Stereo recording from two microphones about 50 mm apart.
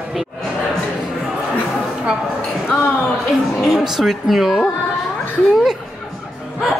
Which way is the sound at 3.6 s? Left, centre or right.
Centre.